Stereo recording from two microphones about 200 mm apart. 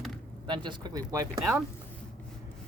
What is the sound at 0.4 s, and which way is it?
Speech, 25° right (ahead or behind).